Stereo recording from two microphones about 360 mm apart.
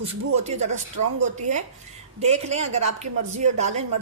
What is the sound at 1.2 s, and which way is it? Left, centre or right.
Speech, centre.